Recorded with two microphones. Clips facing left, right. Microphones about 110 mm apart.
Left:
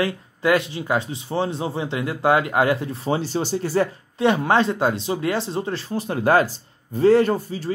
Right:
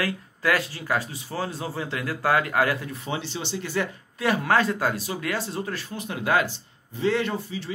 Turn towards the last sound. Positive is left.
turn(degrees=40)  # may be behind; listen again after turning